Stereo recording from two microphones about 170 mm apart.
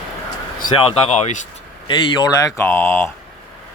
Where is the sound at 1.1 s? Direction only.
40° left (ahead or behind).